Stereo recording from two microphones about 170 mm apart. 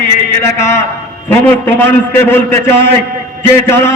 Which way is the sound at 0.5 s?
15° left (ahead or behind).